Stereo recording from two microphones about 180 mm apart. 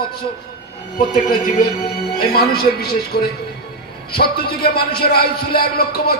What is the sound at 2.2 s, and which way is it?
Speech, 60° left (ahead or behind).